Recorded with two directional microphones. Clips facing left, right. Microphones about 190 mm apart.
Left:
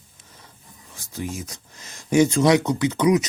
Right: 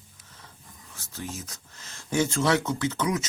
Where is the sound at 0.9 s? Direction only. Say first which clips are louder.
Left 6 dB; 15° left (ahead or behind).